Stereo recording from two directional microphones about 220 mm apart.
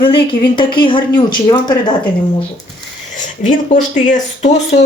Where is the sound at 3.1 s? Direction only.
35° left (ahead or behind).